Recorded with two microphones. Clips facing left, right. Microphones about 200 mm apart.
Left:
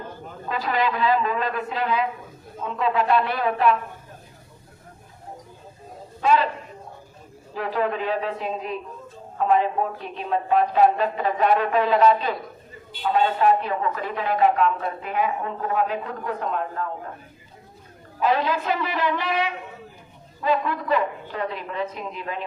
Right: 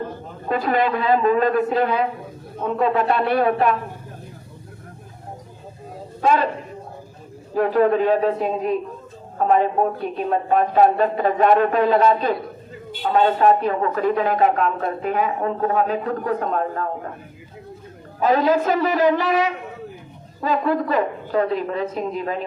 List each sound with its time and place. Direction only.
0.4 s speech: 50° right (ahead or behind)
6.2 s speech: 45° right (ahead or behind)
7.5 s a man's voice: 45° right (ahead or behind)
18.2 s a man's voice: 45° right (ahead or behind)